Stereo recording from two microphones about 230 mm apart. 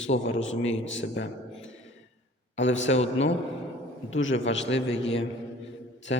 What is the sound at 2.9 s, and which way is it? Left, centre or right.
Speech, left.